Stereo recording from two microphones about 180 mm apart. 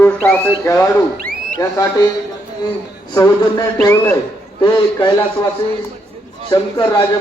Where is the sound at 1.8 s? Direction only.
15° left (ahead or behind).